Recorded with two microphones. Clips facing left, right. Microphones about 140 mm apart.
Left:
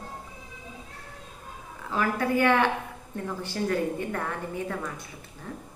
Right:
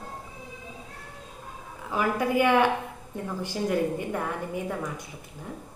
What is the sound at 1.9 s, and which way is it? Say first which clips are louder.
A woman's voice: right 1 dB; 10° right (ahead or behind).